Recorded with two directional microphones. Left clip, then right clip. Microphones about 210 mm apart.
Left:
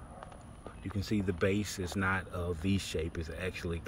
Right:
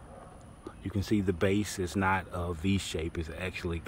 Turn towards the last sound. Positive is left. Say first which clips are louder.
# right 2 dB
turn(degrees=-10)  # may be behind; listen again after turning